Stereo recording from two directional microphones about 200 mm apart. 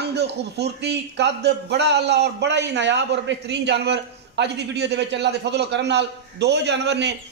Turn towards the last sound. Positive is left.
turn(degrees=-60)  # may be behind; listen again after turning